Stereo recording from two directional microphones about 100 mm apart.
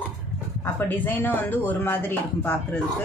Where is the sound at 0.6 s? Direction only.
20° left (ahead or behind).